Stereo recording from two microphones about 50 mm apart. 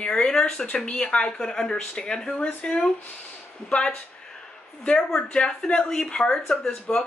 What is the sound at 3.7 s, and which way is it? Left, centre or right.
Speech, left.